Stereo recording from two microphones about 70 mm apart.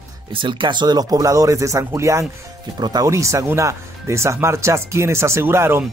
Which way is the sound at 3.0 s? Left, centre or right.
Right.